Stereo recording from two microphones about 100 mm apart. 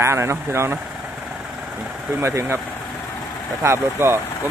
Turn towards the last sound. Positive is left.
turn(degrees=-25)  # may be behind; listen again after turning